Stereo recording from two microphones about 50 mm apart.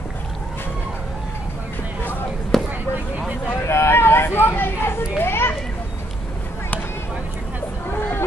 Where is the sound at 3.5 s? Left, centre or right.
Left.